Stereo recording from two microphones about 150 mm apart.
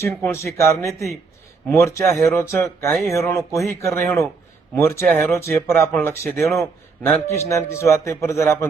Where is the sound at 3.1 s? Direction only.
20° left (ahead or behind).